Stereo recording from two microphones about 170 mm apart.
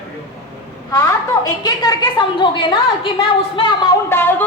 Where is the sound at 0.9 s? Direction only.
20° left (ahead or behind).